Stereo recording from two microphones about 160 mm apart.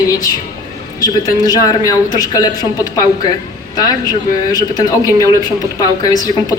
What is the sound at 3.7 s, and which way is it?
Speech, 25° left (ahead or behind).